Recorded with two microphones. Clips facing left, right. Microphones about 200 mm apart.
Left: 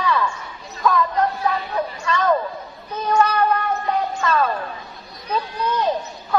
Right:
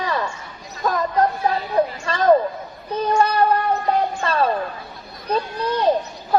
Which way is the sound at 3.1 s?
30° right (ahead or behind).